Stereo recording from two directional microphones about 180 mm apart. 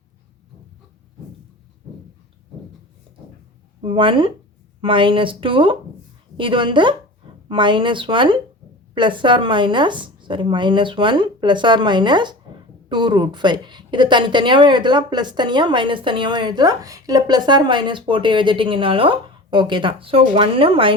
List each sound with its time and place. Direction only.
3.8 s a woman's voice: 30° right (ahead or behind)